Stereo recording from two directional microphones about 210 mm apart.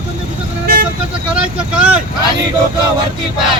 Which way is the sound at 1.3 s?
5° right (ahead or behind).